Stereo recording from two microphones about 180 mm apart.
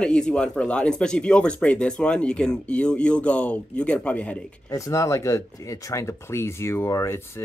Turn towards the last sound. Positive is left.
turn(degrees=15)  # may be behind; listen again after turning